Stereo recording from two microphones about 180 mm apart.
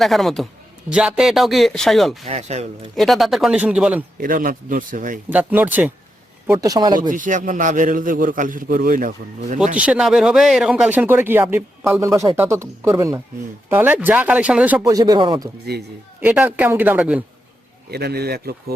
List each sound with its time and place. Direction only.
0.0 s speech: centre (ahead or behind)
2.2 s speech: 35° right (ahead or behind)
2.9 s speech: centre (ahead or behind)
4.2 s a man's voice: 50° right (ahead or behind)
5.3 s speech: 10° right (ahead or behind)
6.5 s speech: 20° right (ahead or behind)
7.1 s a man's voice: 45° right (ahead or behind)
9.7 s speech: 5° right (ahead or behind)
14.9 s speech: 25° right (ahead or behind)
15.7 s a man's voice: 60° right (ahead or behind)
16.2 s speech: 10° right (ahead or behind)
17.9 s a man's voice: 60° right (ahead or behind)